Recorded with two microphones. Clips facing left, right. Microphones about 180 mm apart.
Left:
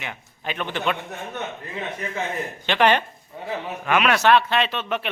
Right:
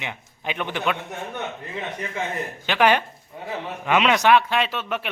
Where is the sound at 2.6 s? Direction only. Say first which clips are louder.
Even; 10° right (ahead or behind).